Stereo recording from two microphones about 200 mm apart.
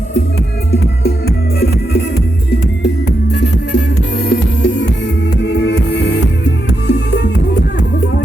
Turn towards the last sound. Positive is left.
turn(degrees=60)  # may be behind; listen again after turning